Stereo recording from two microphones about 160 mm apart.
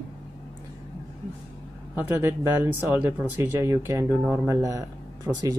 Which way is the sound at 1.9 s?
10° right (ahead or behind).